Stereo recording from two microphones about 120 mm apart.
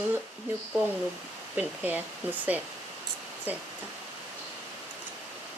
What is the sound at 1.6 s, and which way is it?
Speech, 15° right (ahead or behind).